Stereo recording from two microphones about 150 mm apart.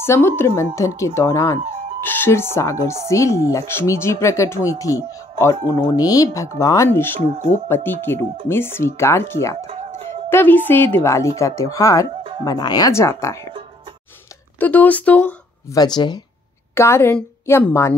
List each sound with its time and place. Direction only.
0.0 s a woman's voice: 15° left (ahead or behind)
14.6 s a woman's voice: 10° left (ahead or behind)
15.7 s speech: 30° left (ahead or behind)
16.7 s a woman's voice: 15° left (ahead or behind)